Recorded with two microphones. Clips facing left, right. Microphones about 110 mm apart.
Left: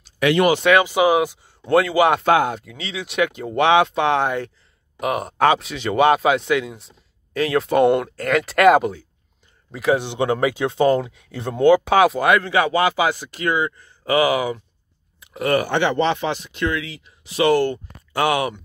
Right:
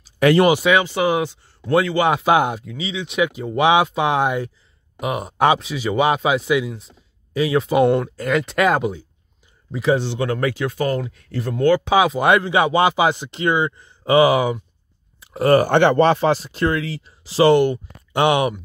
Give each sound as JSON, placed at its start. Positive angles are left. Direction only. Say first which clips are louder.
{"t": 0.2, "sound": "speech", "louder": "right 3 dB", "side_deg": -40}
{"t": 0.8, "sound": "speech", "louder": "left 3 dB", "side_deg": 10}
{"t": 2.2, "sound": "speech", "louder": "even", "side_deg": -15}
{"t": 2.6, "sound": "speech", "louder": "right 3 dB", "side_deg": 0}
{"t": 5.0, "sound": "speech", "louder": "even", "side_deg": 0}
{"t": 9.9, "sound": "speech", "louder": "left 1 dB", "side_deg": 20}
{"t": 11.9, "sound": "speech", "louder": "left 1 dB", "side_deg": -5}
{"t": 12.2, "sound": "a man's voice", "louder": "right 1 dB", "side_deg": -20}
{"t": 15.1, "sound": "speech", "louder": "right 5 dB", "side_deg": -35}
{"t": 15.7, "sound": "speech", "louder": "right 5 dB", "side_deg": -50}
{"t": 17.6, "sound": "speech", "louder": "right 3 dB", "side_deg": -20}